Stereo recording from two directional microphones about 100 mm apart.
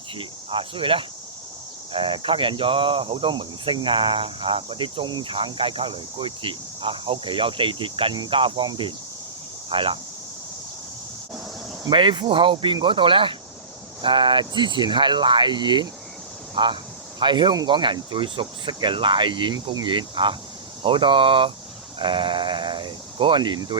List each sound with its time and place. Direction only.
0.2 s speech: 60° right (ahead or behind)
11.9 s speech: 55° right (ahead or behind)
14.0 s cricket: 55° right (ahead or behind)
19.7 s speech: 50° right (ahead or behind)